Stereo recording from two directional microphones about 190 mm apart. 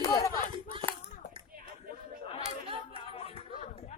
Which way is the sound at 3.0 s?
30° left (ahead or behind).